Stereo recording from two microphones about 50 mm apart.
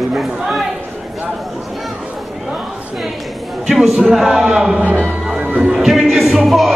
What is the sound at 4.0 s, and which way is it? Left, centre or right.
Speech, centre.